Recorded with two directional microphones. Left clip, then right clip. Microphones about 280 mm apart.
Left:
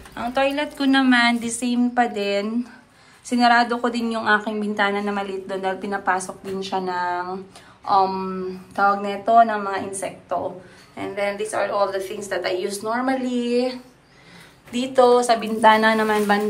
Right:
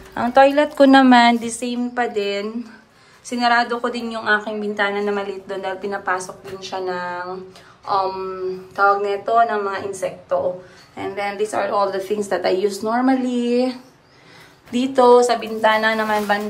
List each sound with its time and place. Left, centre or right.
0.1 s speech: right
1.1 s a woman's voice: centre